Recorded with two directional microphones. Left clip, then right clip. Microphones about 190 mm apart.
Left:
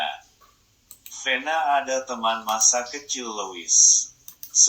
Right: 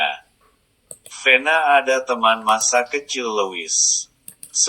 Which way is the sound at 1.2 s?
20° right (ahead or behind).